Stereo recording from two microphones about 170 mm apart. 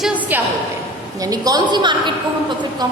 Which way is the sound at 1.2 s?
20° right (ahead or behind).